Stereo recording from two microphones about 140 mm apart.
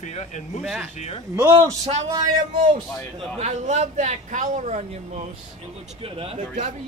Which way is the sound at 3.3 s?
55° right (ahead or behind).